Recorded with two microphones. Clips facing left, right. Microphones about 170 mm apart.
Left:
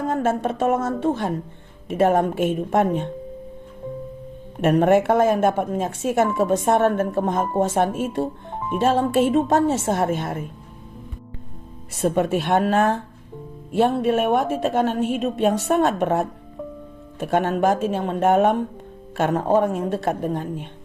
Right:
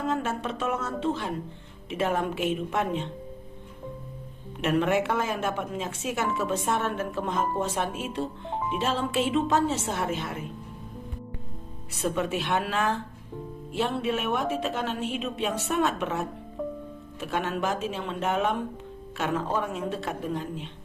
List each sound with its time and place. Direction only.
0.1 s a woman's voice: 50° left (ahead or behind)
4.6 s a woman's voice: 50° left (ahead or behind)
11.9 s a woman's voice: 50° left (ahead or behind)